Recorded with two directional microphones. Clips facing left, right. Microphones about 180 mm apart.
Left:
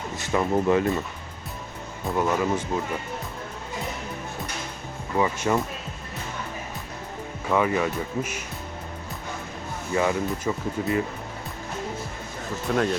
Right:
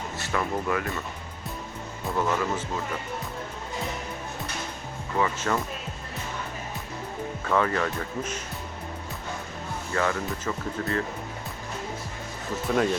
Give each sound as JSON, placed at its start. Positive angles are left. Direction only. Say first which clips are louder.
{"t": 0.2, "sound": "speech", "louder": "left 6 dB", "side_deg": 20}
{"t": 2.1, "sound": "speech", "louder": "left 3 dB", "side_deg": 15}
{"t": 5.1, "sound": "speech", "louder": "left 3 dB", "side_deg": 15}
{"t": 7.5, "sound": "speech", "louder": "left 2 dB", "side_deg": 10}
{"t": 9.9, "sound": "speech", "louder": "left 4 dB", "side_deg": 15}
{"t": 12.6, "sound": "speech", "louder": "even", "side_deg": 0}